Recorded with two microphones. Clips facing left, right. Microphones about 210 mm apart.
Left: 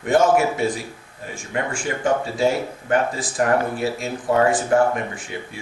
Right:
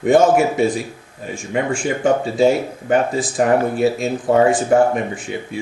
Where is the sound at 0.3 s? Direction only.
20° right (ahead or behind).